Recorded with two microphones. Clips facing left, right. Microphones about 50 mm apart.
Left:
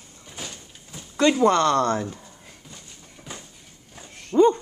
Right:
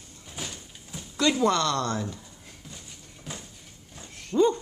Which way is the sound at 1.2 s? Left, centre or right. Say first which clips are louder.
Left 5 dB; left.